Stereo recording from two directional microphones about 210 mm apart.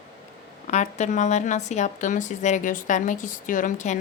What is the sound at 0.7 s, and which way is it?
Speech, 35° left (ahead or behind).